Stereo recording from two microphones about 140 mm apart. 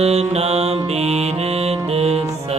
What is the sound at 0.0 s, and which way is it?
Music, 50° right (ahead or behind).